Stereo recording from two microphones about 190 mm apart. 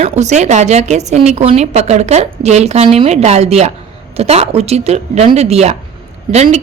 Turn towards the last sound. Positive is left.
turn(degrees=-35)  # may be behind; listen again after turning